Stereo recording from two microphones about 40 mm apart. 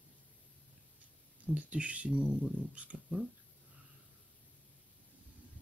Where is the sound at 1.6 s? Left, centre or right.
Right.